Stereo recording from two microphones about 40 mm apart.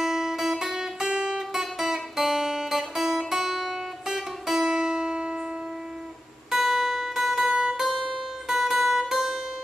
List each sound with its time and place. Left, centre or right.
0.0 s guitar: centre
1.5 s music: centre
6.5 s music: centre
7.5 s music: centre
8.5 s music: centre